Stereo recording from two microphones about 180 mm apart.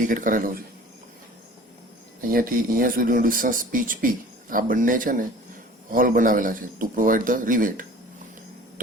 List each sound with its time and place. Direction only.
0.0 s speech: 45° right (ahead or behind)
2.2 s speech: 50° right (ahead or behind)